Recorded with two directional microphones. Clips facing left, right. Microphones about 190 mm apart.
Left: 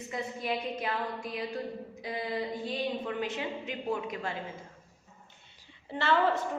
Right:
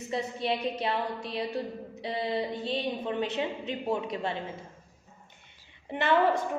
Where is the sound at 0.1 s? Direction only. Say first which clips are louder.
Right 4 dB; 30° right (ahead or behind).